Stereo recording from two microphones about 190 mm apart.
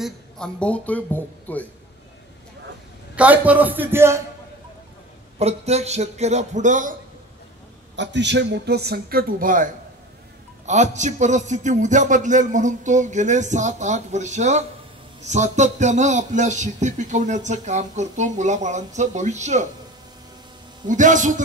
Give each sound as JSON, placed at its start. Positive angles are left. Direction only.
{"t": 0.0, "sound": "speech", "side_deg": 5}
{"t": 3.2, "sound": "a man's voice", "side_deg": -10}
{"t": 5.4, "sound": "a man's voice", "side_deg": -35}
{"t": 7.9, "sound": "a man's voice", "side_deg": -70}
{"t": 20.8, "sound": "a man's voice", "side_deg": -40}